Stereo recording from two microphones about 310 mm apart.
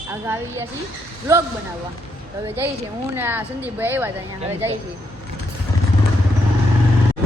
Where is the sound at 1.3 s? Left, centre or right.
Centre.